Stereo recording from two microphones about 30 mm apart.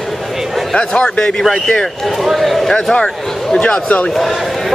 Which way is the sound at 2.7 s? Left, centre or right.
Left.